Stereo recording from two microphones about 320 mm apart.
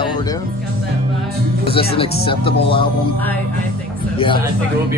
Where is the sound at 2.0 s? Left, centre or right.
Centre.